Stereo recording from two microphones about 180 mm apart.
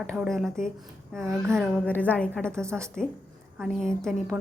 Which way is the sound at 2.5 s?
15° right (ahead or behind).